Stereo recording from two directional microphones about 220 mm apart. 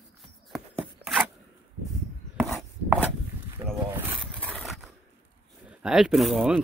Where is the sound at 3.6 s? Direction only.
20° right (ahead or behind).